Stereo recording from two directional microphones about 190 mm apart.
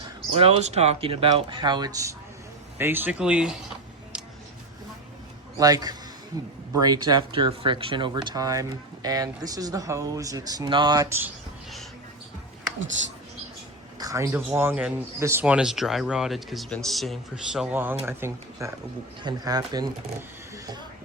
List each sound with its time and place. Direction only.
0.3 s speech: 35° right (ahead or behind); by 3.6 s 5° right (ahead or behind)
5.5 s speech: 20° right (ahead or behind)
14.0 s speech: 15° right (ahead or behind)